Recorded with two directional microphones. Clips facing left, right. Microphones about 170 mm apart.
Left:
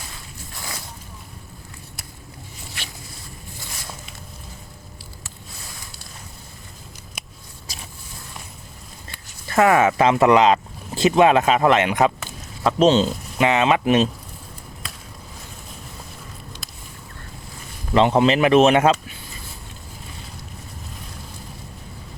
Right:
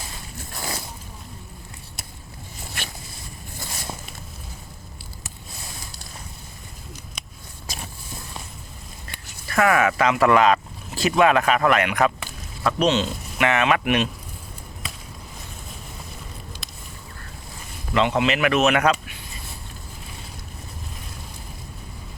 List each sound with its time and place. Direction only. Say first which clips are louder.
2.8 s a sound: right 3 dB; 50° right (ahead or behind)
9.5 s speech: left 3 dB; 25° left (ahead or behind)
14.8 s chop: right 2 dB; centre (ahead or behind)
17.9 s speech: left 5 dB; 35° left (ahead or behind)